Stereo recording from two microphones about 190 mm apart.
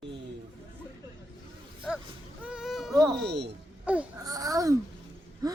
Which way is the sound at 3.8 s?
5° right (ahead or behind).